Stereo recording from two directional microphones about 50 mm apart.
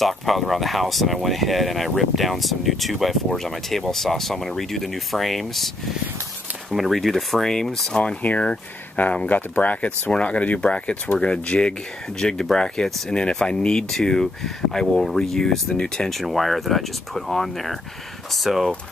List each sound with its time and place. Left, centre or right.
0.0 s speech: centre
6.7 s speech: centre
8.2 s speech: left; by 18.7 s centre